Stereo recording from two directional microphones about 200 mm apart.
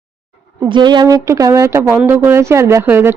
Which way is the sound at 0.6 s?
20° right (ahead or behind).